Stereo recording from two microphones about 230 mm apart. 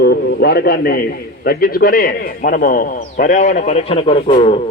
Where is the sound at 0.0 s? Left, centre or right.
Left.